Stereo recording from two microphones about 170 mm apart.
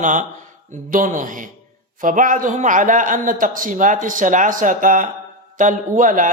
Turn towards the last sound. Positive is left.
turn(degrees=-50)  # may be behind; listen again after turning